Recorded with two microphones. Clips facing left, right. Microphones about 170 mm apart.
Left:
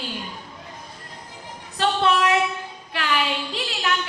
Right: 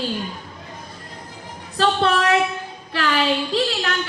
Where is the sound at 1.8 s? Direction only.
35° right (ahead or behind).